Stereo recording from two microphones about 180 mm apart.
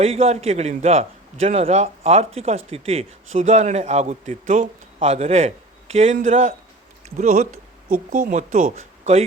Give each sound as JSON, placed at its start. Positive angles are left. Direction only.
{"t": 0.0, "sound": "a man's voice", "side_deg": -35}